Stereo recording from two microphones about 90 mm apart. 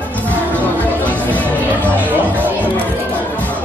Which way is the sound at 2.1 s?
20° right (ahead or behind).